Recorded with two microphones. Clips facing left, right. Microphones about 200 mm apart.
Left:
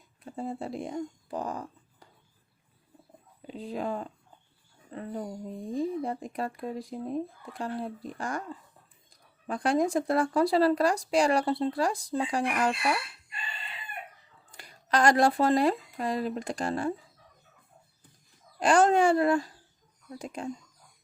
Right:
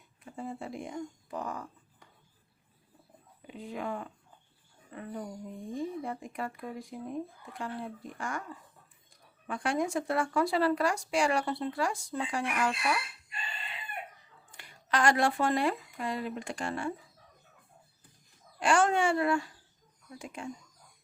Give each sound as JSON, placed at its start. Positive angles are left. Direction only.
{"t": 0.3, "sound": "speech", "side_deg": 35}
{"t": 3.4, "sound": "speech", "side_deg": 35}
{"t": 9.5, "sound": "speech", "side_deg": 35}
{"t": 14.5, "sound": "speech", "side_deg": 40}
{"t": 18.6, "sound": "speech", "side_deg": 40}